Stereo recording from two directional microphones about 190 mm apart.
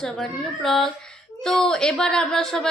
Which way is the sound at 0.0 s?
Centre (ahead or behind).